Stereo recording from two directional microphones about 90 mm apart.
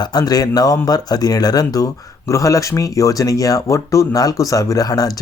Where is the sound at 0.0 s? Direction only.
50° left (ahead or behind).